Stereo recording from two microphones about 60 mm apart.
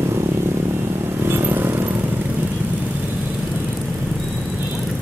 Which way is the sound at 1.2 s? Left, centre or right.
Right.